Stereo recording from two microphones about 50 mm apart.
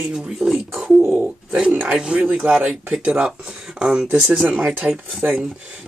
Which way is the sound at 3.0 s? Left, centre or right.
Right.